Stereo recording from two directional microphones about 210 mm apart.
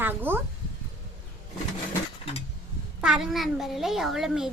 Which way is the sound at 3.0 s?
Centre (ahead or behind).